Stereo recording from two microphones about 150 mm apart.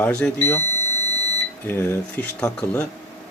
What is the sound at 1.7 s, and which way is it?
Speech, 15° left (ahead or behind).